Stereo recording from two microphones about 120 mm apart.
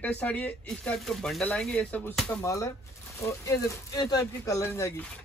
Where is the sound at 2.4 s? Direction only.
25° left (ahead or behind).